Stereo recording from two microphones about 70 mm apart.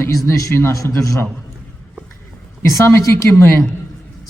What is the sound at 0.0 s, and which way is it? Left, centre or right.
Speech, left.